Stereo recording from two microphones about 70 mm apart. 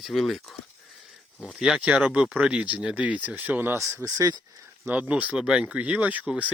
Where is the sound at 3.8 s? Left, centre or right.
Right.